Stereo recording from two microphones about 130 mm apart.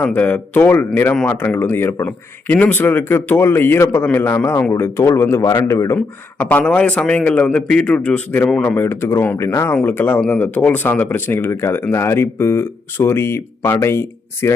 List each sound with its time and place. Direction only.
0.0 s speech: 15° left (ahead or behind)